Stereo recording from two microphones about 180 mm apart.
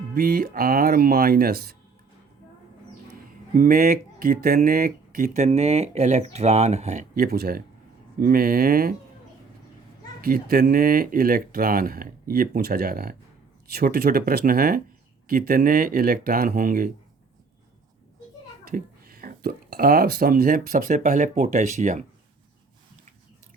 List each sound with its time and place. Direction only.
0.1 s speech: 55° right (ahead or behind)
3.5 s speech: 50° right (ahead or behind)
7.2 s speech: 55° right (ahead or behind)
10.2 s speech: 55° right (ahead or behind)
18.7 s speech: 55° right (ahead or behind)